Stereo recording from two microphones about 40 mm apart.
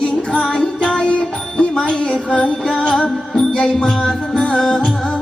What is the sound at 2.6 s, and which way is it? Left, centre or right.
Music, centre.